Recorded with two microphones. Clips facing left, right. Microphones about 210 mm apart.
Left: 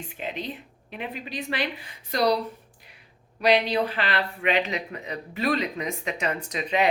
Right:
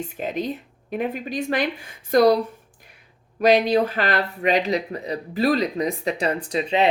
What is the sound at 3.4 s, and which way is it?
A woman's voice, 45° right (ahead or behind).